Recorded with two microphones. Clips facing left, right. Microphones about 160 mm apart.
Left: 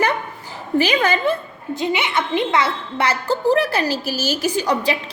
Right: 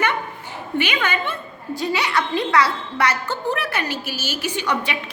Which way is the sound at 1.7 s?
20° left (ahead or behind).